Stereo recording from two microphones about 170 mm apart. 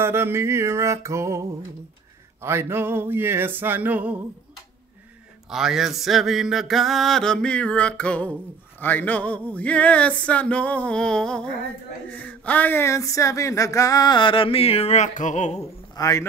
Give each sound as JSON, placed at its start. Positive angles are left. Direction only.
{"t": 0.0, "sound": "music", "side_deg": -15}
{"t": 5.5, "sound": "a sound", "side_deg": -5}
{"t": 15.9, "sound": "a man's voice", "side_deg": 20}